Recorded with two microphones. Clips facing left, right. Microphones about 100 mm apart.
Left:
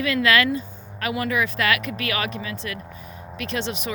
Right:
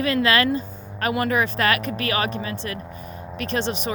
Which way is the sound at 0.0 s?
35° right (ahead or behind).